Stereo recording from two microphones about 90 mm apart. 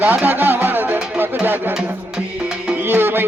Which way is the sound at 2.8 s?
25° right (ahead or behind).